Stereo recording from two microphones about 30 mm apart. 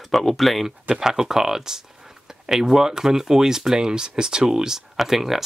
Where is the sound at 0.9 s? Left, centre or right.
Centre.